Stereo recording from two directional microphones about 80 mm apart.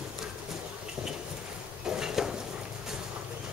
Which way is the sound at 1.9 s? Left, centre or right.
Centre.